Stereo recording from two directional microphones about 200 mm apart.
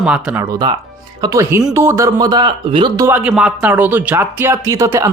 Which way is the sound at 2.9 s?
15° right (ahead or behind).